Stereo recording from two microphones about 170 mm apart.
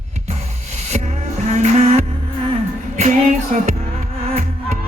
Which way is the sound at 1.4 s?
45° right (ahead or behind).